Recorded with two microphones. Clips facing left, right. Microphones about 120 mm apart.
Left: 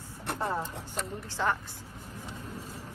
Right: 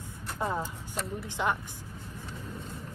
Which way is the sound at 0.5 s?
Centre (ahead or behind).